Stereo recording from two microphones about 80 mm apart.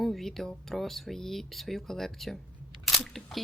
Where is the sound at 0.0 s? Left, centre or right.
Centre.